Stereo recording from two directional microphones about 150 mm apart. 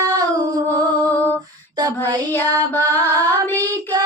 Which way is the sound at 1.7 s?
25° right (ahead or behind).